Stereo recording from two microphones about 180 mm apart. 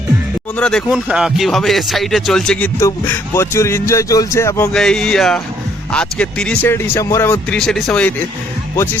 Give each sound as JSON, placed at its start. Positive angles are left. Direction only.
{"t": 0.5, "sound": "speech", "side_deg": 5}
{"t": 2.8, "sound": "speech", "side_deg": 15}
{"t": 4.7, "sound": "speech", "side_deg": 5}
{"t": 7.6, "sound": "speech", "side_deg": 0}